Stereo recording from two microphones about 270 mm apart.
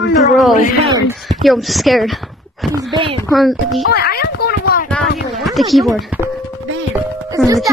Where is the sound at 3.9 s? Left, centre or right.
Left.